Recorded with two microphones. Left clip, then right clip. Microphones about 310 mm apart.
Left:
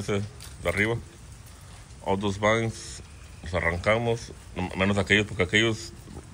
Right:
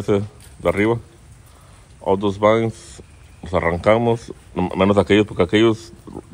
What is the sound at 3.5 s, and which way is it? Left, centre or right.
Speech, right.